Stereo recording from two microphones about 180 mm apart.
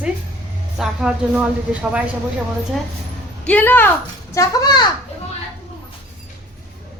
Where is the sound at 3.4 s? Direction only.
10° left (ahead or behind).